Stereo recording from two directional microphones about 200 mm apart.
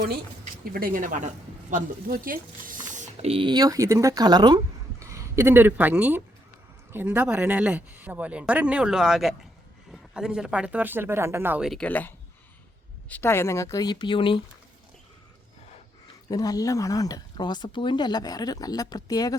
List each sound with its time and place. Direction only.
0.6 s speech: 50° right (ahead or behind); by 14.4 s 25° left (ahead or behind)
16.3 s speech: 20° left (ahead or behind)